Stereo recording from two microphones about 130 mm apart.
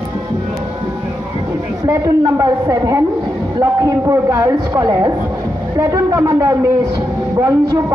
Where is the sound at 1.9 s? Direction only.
25° right (ahead or behind).